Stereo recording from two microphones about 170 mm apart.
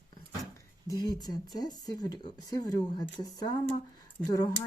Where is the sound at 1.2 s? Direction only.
25° left (ahead or behind).